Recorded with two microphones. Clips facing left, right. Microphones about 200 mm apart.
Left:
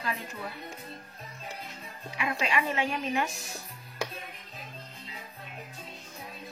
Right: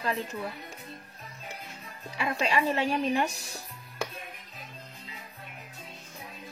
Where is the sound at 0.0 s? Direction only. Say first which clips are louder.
Right 4 dB; 35° right (ahead or behind).